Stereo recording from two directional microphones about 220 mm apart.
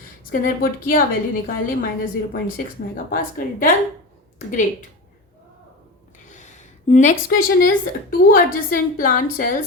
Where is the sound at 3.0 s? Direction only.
40° left (ahead or behind).